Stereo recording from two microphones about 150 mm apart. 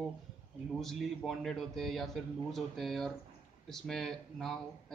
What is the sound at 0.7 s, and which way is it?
Speech, centre (ahead or behind).